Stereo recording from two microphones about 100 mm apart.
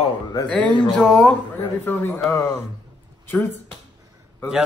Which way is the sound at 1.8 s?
20° left (ahead or behind).